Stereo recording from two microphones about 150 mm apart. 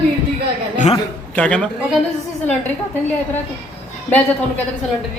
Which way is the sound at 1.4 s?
5° left (ahead or behind).